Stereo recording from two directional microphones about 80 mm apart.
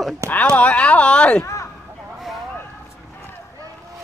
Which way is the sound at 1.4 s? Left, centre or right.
Left.